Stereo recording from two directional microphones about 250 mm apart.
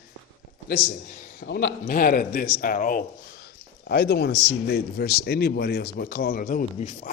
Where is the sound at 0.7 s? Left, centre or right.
Left.